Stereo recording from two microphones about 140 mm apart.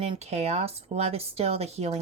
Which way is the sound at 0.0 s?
45° right (ahead or behind).